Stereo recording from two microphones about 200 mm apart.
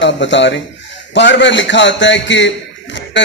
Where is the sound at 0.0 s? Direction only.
65° left (ahead or behind).